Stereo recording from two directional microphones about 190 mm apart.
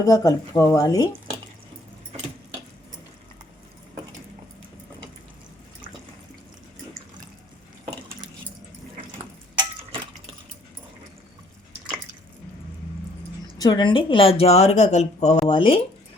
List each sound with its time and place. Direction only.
0.0 s speech: 20° left (ahead or behind)
13.6 s speech: 25° left (ahead or behind)